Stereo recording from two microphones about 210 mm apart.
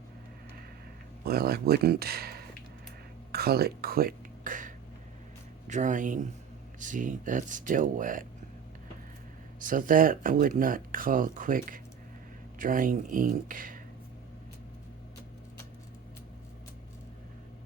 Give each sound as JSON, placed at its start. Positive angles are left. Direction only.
{"t": 1.2, "sound": "speech", "side_deg": -50}
{"t": 3.3, "sound": "a sound", "side_deg": -45}
{"t": 5.6, "sound": "speech", "side_deg": -35}
{"t": 9.6, "sound": "speech", "side_deg": -40}